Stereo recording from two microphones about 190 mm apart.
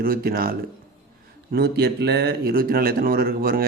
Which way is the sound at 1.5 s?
55° right (ahead or behind).